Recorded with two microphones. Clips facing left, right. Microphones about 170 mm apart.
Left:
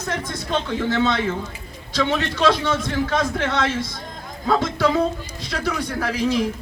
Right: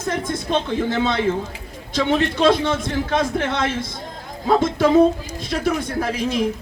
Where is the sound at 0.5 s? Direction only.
25° right (ahead or behind).